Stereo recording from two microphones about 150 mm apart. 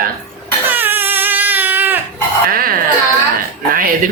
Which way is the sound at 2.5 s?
75° right (ahead or behind).